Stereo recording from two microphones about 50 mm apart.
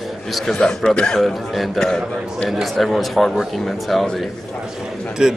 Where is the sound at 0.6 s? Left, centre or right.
Centre.